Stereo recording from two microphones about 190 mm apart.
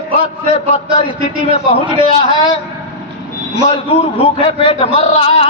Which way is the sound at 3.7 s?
30° left (ahead or behind).